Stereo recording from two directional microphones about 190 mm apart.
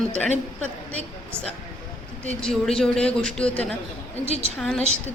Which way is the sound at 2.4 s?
5° left (ahead or behind).